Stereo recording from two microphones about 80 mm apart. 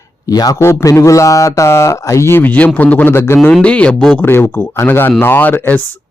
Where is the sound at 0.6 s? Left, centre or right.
Left.